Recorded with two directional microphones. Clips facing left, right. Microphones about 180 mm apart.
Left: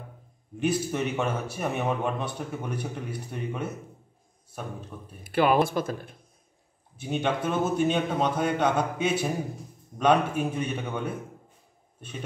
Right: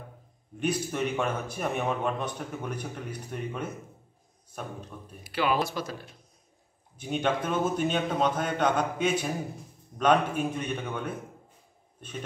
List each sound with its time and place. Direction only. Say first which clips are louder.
0.6 s speech: left 2 dB; 5° left (ahead or behind)
5.2 s speech: left 5 dB; 50° left (ahead or behind)
7.0 s speech: left 1 dB; 5° left (ahead or behind)